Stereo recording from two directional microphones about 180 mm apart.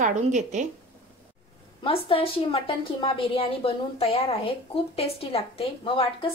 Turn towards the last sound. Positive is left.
turn(degrees=30)  # may be behind; listen again after turning